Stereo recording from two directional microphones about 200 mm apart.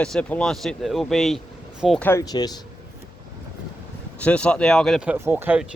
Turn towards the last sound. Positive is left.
turn(degrees=-10)  # may be behind; listen again after turning